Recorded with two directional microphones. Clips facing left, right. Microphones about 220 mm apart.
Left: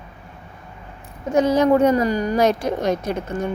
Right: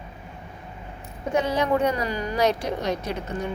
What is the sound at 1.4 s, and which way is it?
A woman's voice, 45° left (ahead or behind).